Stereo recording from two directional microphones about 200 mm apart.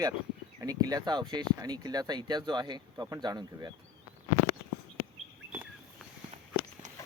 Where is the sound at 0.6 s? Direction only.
20° right (ahead or behind).